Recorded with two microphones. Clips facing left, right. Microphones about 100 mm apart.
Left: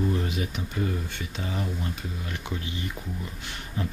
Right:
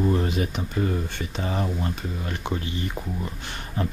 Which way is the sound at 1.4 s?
45° right (ahead or behind).